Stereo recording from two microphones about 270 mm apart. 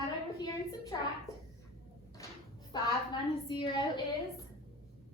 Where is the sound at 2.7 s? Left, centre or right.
Centre.